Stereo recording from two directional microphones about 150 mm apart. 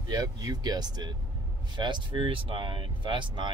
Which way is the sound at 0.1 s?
25° right (ahead or behind).